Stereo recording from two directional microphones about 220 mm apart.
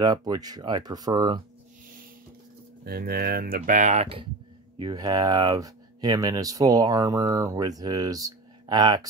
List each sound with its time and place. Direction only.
0.0 s speech: 20° right (ahead or behind)
2.8 s speech: 45° right (ahead or behind); by 9.0 s 20° right (ahead or behind)